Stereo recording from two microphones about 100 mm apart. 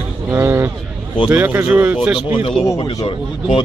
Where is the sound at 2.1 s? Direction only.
50° left (ahead or behind).